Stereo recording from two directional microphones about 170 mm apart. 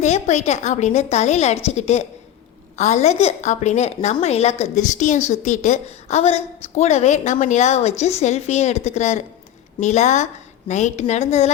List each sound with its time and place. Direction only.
0.0 s a woman's voice: 45° left (ahead or behind)